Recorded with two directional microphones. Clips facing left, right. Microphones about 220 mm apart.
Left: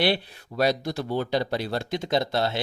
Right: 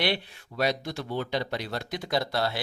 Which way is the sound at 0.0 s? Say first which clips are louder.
Left 4 dB; 35° left (ahead or behind).